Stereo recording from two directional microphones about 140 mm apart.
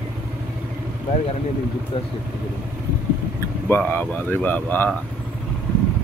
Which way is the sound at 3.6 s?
15° left (ahead or behind).